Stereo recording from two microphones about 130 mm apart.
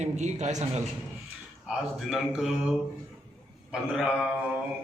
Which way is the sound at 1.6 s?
Centre (ahead or behind).